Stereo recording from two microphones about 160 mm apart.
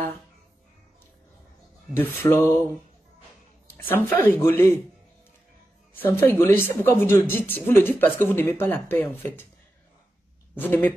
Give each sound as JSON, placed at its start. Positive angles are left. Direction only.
{"t": 2.0, "sound": "speech", "side_deg": 15}
{"t": 3.7, "sound": "speech", "side_deg": 15}
{"t": 5.9, "sound": "speech", "side_deg": 15}
{"t": 10.5, "sound": "speech", "side_deg": 10}